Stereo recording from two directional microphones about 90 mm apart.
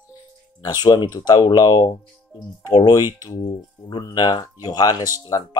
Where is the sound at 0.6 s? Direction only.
50° left (ahead or behind).